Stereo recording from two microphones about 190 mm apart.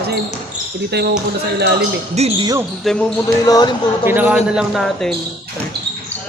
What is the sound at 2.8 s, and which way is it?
Speech, 5° left (ahead or behind).